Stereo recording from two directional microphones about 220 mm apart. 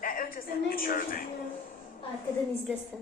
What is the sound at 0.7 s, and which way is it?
Music, 40° left (ahead or behind).